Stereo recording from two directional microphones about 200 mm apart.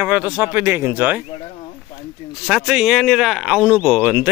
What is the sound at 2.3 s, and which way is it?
Speech, 5° right (ahead or behind).